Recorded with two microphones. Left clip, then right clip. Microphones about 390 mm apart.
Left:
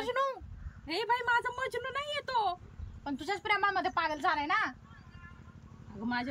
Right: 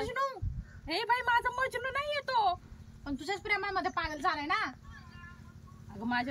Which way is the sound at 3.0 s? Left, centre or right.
Centre.